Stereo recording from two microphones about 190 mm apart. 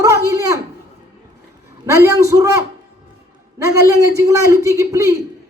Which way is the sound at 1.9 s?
15° right (ahead or behind).